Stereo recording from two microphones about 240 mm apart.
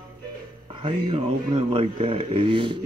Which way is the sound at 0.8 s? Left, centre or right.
Right.